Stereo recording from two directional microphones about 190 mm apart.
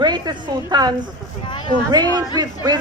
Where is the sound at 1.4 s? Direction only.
25° left (ahead or behind).